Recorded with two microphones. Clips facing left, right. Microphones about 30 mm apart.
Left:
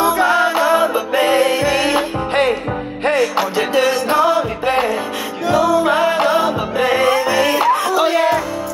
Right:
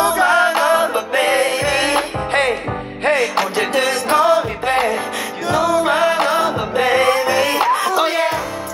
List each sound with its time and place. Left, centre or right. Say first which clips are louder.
0.0 s music: even; right
3.1 s music: even; right